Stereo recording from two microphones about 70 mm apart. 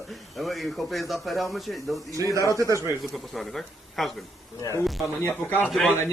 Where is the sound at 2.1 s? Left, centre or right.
Right.